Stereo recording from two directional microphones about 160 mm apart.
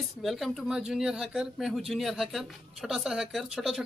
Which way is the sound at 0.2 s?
Centre (ahead or behind).